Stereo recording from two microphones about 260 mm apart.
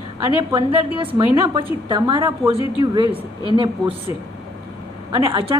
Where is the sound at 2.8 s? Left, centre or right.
Centre.